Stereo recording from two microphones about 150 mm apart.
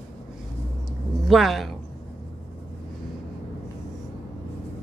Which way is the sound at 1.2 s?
Centre (ahead or behind).